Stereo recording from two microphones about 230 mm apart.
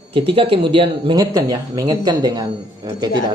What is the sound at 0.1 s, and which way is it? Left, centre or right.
Speech, right.